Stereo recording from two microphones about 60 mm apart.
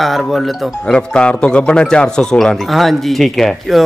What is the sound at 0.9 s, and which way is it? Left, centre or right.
A man's voice, centre.